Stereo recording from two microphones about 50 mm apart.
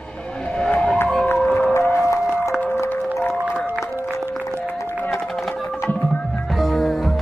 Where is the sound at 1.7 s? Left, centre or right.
Left.